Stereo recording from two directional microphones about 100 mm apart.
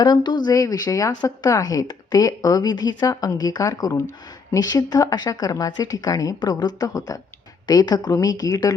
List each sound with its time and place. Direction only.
0.0 s a woman's voice: 45° left (ahead or behind)